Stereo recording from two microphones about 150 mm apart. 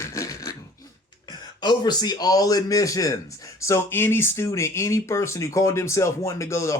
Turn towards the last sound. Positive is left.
turn(degrees=20)  # may be behind; listen again after turning